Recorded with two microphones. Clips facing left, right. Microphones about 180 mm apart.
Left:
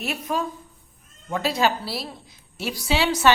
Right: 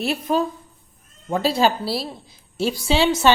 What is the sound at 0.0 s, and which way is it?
A woman's voice, 30° right (ahead or behind).